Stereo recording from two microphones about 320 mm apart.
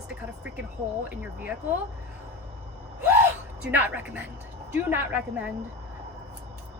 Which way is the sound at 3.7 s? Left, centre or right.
Centre.